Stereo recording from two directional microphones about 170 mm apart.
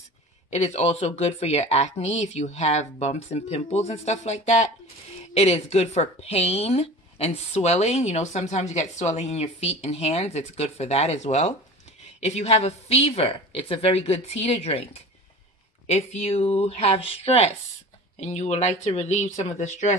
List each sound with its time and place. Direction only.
0.5 s a woman's voice: 40° left (ahead or behind)